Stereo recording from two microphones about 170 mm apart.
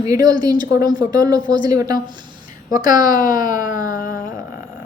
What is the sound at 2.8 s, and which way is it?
Speech, 50° left (ahead or behind).